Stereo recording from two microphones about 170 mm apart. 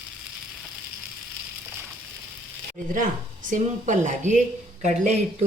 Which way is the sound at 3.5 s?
45° right (ahead or behind).